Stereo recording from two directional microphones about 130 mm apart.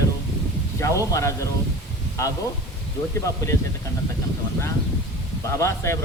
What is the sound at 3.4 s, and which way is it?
Speech, 25° left (ahead or behind).